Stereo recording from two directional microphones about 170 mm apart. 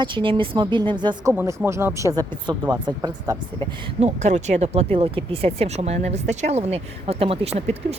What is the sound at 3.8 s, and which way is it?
Speech, 40° right (ahead or behind).